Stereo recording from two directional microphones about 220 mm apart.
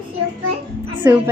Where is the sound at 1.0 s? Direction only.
10° right (ahead or behind).